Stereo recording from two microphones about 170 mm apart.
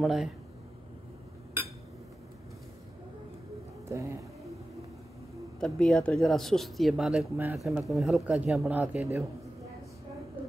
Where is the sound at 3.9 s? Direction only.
15° right (ahead or behind).